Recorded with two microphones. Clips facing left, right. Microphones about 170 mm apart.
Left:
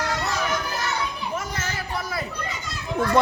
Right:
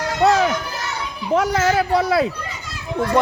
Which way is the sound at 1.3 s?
85° right.